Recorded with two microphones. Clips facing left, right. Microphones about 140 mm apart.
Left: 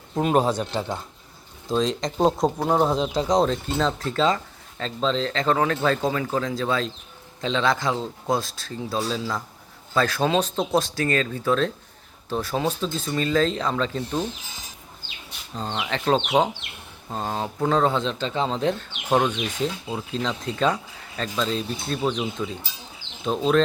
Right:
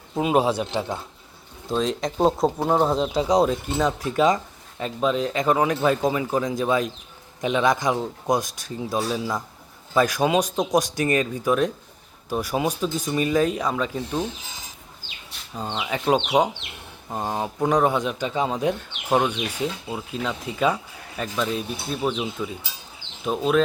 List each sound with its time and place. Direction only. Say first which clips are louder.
0.1 s speech: even; 5° right (ahead or behind)
15.5 s speech: even; 5° right (ahead or behind)